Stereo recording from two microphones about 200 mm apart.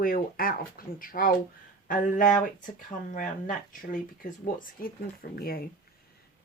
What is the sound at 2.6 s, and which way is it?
Speech, 40° left (ahead or behind).